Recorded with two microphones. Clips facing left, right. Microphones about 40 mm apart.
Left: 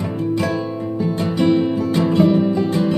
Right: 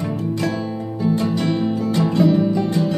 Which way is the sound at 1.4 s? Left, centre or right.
Centre.